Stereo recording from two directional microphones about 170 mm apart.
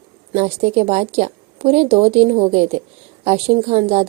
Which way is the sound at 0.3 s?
35° right (ahead or behind).